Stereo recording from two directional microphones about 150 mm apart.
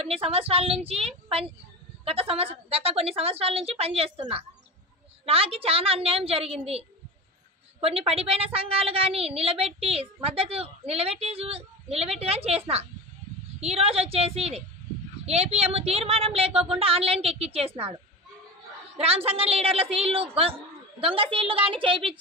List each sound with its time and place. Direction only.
0.0 s a woman's voice: 40° right (ahead or behind)
18.9 s a woman's voice: 40° right (ahead or behind)